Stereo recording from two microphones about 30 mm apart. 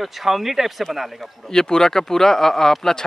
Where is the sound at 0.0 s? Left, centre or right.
Centre.